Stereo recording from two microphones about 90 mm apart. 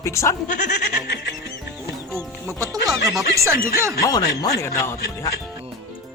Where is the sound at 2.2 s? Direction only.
35° right (ahead or behind).